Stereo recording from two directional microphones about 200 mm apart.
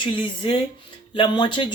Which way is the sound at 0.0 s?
25° left (ahead or behind).